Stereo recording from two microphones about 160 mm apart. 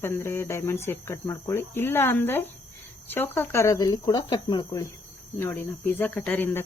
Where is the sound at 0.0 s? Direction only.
15° left (ahead or behind).